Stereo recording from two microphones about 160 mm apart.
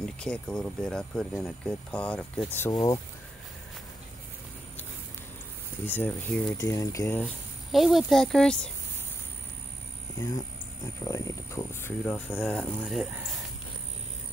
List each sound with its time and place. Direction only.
0.0 s speech: 5° left (ahead or behind)
2.7 s speech: 25° left (ahead or behind)
5.9 s speech: 10° left (ahead or behind)
6.6 s speech: 20° left (ahead or behind)
7.7 s speech: centre (ahead or behind)
11.0 s speech: 20° left (ahead or behind)
12.8 s speech: centre (ahead or behind)